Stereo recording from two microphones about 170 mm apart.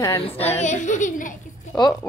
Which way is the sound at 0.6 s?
45° left (ahead or behind).